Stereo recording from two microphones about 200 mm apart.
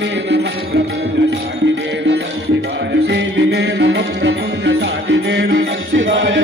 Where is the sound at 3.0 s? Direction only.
60° right (ahead or behind).